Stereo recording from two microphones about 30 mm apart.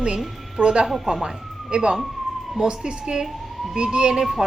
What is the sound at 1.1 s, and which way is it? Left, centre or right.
Speech, centre.